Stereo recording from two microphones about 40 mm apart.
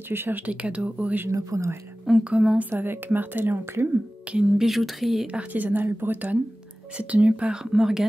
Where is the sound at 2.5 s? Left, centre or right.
Right.